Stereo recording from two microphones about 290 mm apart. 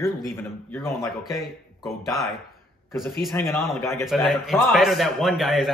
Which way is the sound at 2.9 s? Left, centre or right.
Centre.